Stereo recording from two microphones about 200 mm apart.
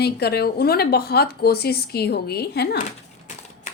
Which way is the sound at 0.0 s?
55° left (ahead or behind).